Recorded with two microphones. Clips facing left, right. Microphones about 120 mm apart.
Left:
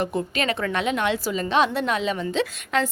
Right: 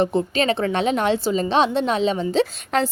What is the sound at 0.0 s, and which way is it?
A woman's voice, 25° right (ahead or behind).